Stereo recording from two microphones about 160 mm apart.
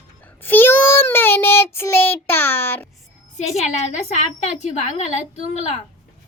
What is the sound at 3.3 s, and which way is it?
A woman's voice, 45° left (ahead or behind).